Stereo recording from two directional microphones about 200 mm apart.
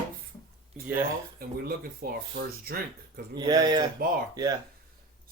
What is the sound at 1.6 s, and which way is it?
Speech, 50° right (ahead or behind).